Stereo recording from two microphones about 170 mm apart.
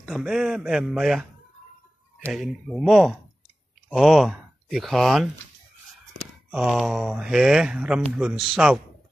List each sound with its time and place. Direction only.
0.0 s speech: centre (ahead or behind)
2.2 s speech: centre (ahead or behind)
6.5 s speech: 5° right (ahead or behind)